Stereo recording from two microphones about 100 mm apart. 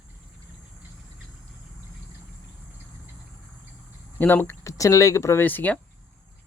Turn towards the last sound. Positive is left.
turn(degrees=20)  # may be behind; listen again after turning